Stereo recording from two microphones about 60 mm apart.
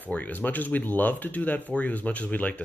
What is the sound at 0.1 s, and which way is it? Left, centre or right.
Speech, left.